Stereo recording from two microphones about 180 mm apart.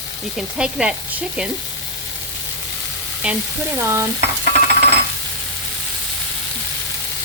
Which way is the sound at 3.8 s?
15° right (ahead or behind).